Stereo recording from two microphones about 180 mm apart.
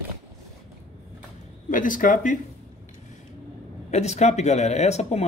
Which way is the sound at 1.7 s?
50° left (ahead or behind).